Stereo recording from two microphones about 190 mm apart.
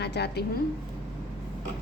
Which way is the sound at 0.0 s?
60° left (ahead or behind).